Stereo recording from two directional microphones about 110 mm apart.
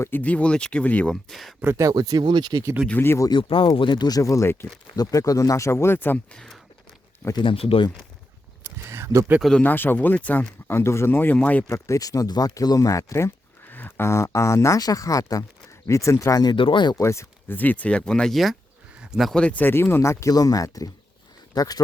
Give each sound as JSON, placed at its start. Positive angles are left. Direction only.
{"t": 0.0, "sound": "speech", "side_deg": 15}
{"t": 1.6, "sound": "speech", "side_deg": -25}
{"t": 3.0, "sound": "speech", "side_deg": 20}
{"t": 3.2, "sound": "speech", "side_deg": 50}
{"t": 6.3, "sound": "speech", "side_deg": 5}
{"t": 7.3, "sound": "speech", "side_deg": 55}
{"t": 8.6, "sound": "a sound", "side_deg": -25}
{"t": 9.4, "sound": "speech", "side_deg": 5}
{"t": 9.6, "sound": "speech", "side_deg": 20}
{"t": 11.7, "sound": "speech", "side_deg": 30}
{"t": 17.0, "sound": "speech", "side_deg": 25}
{"t": 18.9, "sound": "a sound", "side_deg": -5}
{"t": 19.3, "sound": "speech", "side_deg": 10}